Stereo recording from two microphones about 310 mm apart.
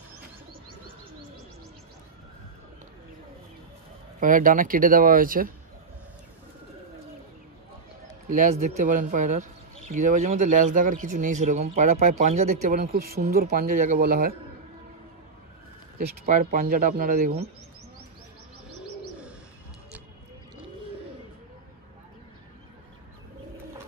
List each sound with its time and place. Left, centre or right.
4.2 s speech: right
8.3 s speech: right
16.3 s speech: right